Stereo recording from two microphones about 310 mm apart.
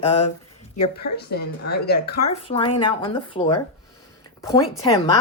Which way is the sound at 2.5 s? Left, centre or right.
Centre.